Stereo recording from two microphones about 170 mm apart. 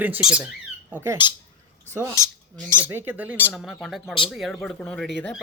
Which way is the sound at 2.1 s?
15° left (ahead or behind).